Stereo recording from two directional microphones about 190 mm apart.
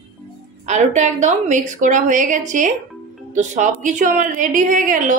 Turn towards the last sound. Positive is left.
turn(degrees=-45)  # may be behind; listen again after turning